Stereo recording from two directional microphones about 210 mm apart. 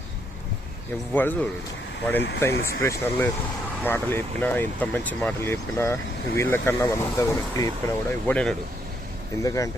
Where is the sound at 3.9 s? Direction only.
10° left (ahead or behind).